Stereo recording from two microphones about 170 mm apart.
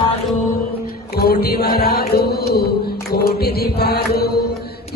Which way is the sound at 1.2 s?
65° left (ahead or behind).